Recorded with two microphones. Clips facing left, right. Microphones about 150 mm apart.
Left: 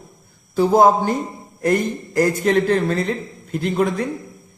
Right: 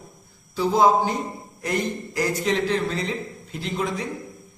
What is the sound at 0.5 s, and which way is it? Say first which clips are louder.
A man's voice: left 5 dB; 50° left (ahead or behind).